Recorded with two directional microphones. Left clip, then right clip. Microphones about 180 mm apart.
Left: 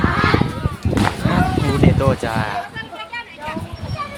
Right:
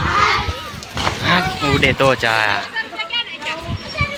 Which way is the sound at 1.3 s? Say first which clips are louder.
Right 3 dB; centre (ahead or behind).